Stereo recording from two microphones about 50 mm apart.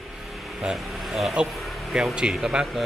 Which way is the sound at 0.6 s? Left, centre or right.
Centre.